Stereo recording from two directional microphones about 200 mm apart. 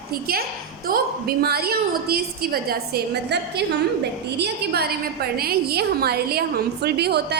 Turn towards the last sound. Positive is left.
turn(degrees=-55)  # may be behind; listen again after turning